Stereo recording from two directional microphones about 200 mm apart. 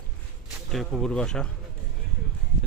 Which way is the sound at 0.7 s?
Centre (ahead or behind).